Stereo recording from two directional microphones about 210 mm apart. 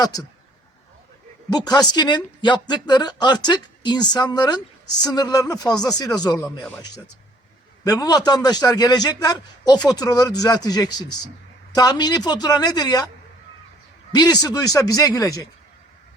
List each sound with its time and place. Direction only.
0.0 s speech: 20° left (ahead or behind)
1.5 s a man's voice: 20° left (ahead or behind)
7.9 s a man's voice: 15° left (ahead or behind)
14.1 s speech: 20° left (ahead or behind)